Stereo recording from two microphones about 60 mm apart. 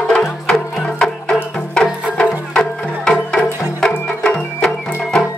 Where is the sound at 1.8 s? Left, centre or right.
Centre.